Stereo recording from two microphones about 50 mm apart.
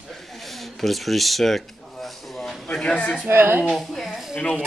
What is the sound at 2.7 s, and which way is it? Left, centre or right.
Speech, centre.